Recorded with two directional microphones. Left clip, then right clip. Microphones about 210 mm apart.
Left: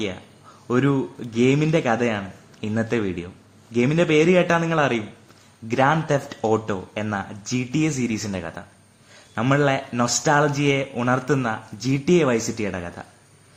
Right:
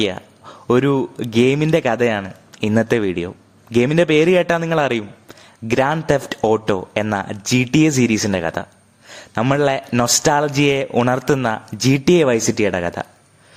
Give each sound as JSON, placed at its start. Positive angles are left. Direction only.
{"t": 0.7, "sound": "speech", "side_deg": -50}